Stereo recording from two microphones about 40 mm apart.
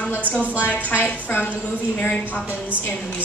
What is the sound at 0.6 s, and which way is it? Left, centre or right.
Speech, left.